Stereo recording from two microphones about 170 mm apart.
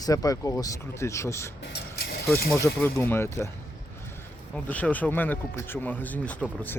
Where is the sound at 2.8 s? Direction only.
15° left (ahead or behind).